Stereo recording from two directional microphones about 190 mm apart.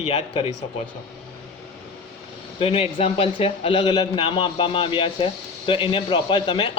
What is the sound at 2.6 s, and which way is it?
A man's voice, 30° left (ahead or behind).